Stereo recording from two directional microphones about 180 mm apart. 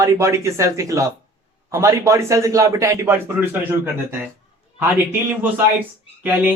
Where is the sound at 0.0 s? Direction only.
15° right (ahead or behind).